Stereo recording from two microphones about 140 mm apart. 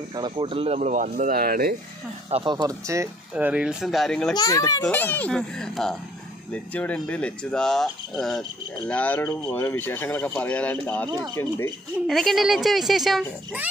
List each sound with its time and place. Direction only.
0.1 s speech: 35° right (ahead or behind)
0.7 s speech: 65° right (ahead or behind); by 1.8 s 90° right
2.3 s speech: 30° right (ahead or behind)
3.3 s speech: 10° right (ahead or behind)
4.4 s a child's voice: 25° left (ahead or behind)
4.8 s speech: 10° left (ahead or behind)
11.1 s speech: 30° right (ahead or behind)
11.3 s a child's voice: 20° left (ahead or behind)
12.1 s speech: centre (ahead or behind)